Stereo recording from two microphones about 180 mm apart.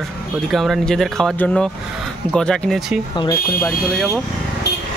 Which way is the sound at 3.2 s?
20° left (ahead or behind).